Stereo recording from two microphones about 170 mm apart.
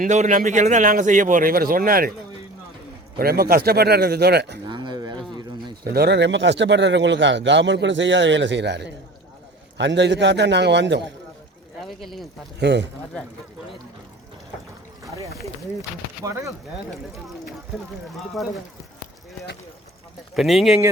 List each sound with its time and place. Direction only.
0.0 s a man's voice: 45° right (ahead or behind)
3.2 s a man's voice: 65° right (ahead or behind); by 4.6 s 85° right
4.7 s a sound: 25° right (ahead or behind)
5.8 s speech: 65° right (ahead or behind); by 11.0 s 90° right
11.8 s speech: centre (ahead or behind)
12.5 s speech: 90° right
16.2 s speech: 20° right (ahead or behind)
20.3 s speech: centre (ahead or behind)